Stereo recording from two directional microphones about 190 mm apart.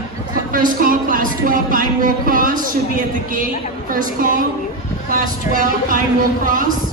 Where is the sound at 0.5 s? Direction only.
45° right (ahead or behind).